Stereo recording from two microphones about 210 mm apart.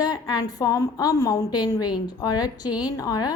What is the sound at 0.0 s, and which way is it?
A woman's voice, 20° left (ahead or behind).